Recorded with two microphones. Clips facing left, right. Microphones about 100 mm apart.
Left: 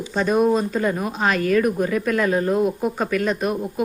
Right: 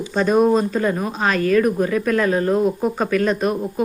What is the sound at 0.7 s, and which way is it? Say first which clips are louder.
Speech: right 2 dB; 10° left (ahead or behind).